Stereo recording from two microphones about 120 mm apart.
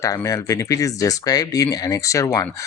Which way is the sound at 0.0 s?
25° left (ahead or behind).